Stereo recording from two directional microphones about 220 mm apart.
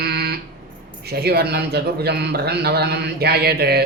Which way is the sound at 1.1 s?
45° right (ahead or behind).